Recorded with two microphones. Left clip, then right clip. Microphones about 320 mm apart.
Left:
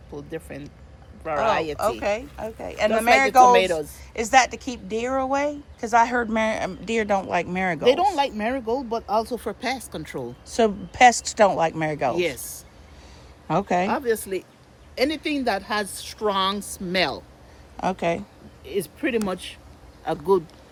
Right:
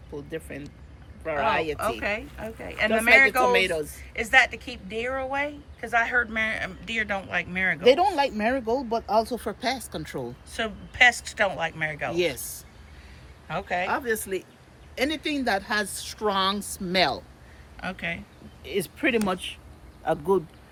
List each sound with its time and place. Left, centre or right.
0.3 s speech: left
1.8 s speech: centre
3.5 s speech: left
3.9 s speech: centre
16.6 s speech: centre
16.8 s speech: centre